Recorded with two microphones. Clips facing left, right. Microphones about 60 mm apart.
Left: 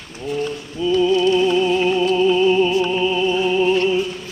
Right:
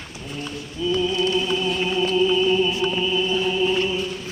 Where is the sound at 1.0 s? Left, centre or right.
Left.